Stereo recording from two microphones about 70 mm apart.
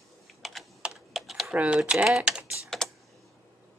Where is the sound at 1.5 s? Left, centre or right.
Centre.